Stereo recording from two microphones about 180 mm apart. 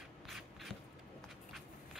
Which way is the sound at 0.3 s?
Centre (ahead or behind).